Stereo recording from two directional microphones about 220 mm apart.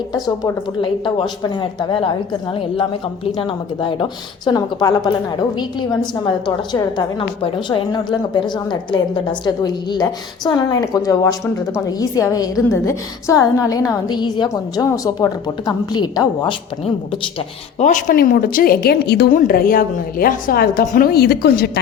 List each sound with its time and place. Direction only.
0.1 s a woman's voice: 20° left (ahead or behind)
17.7 s a woman's voice: 35° left (ahead or behind)